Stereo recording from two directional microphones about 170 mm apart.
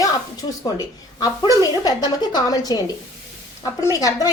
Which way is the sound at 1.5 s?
25° left (ahead or behind).